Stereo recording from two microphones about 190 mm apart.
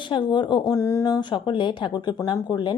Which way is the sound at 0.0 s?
25° left (ahead or behind).